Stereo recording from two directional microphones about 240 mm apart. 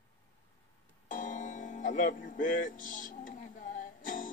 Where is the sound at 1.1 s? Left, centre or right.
Left.